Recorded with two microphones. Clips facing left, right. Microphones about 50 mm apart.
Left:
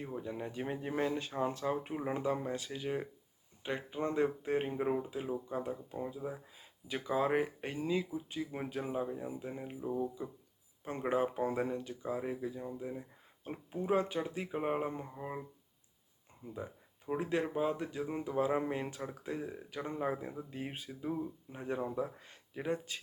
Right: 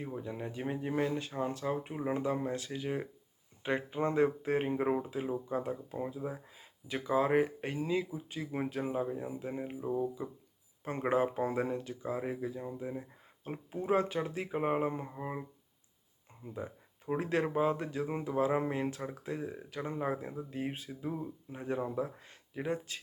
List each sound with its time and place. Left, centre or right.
0.0 s speech: centre
3.6 s speech: centre
10.8 s speech: right
11.1 s speech: centre
13.9 s speech: centre
16.4 s a sound: centre
17.2 s speech: centre
17.4 s speech: centre
18.7 s speech: centre